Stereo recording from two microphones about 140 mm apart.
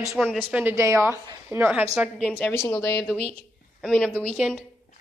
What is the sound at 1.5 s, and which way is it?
Speech, 15° right (ahead or behind).